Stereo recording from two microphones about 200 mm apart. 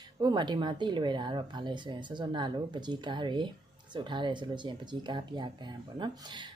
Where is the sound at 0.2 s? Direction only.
20° right (ahead or behind).